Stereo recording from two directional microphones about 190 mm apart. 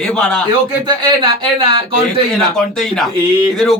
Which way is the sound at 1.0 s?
25° right (ahead or behind).